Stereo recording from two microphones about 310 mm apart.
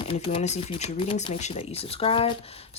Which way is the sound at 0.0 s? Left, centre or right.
Centre.